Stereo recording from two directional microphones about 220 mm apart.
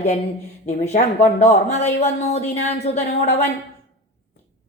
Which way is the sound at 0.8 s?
30° left (ahead or behind).